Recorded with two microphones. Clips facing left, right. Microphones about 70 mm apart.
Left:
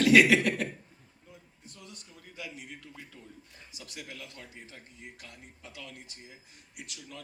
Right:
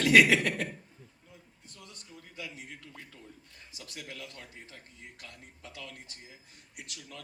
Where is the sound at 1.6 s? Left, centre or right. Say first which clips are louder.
Left 3 dB; left.